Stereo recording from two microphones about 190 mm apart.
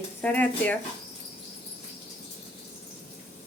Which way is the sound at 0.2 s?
10° left (ahead or behind).